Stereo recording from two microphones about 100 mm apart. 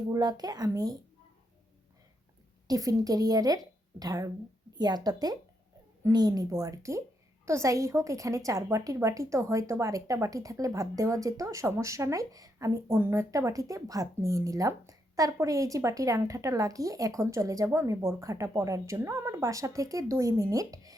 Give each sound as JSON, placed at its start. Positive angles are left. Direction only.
{"t": 0.1, "sound": "a woman's voice", "side_deg": -40}
{"t": 2.6, "sound": "a woman's voice", "side_deg": -40}